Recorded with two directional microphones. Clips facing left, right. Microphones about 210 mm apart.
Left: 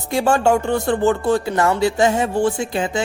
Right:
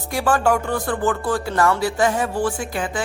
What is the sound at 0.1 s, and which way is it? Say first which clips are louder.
Speech: left 3 dB; 25° left (ahead or behind).